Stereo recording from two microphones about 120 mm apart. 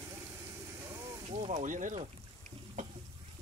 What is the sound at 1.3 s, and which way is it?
Speech, 75° right (ahead or behind).